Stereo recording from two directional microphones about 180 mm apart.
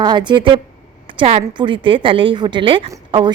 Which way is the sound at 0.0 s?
25° right (ahead or behind).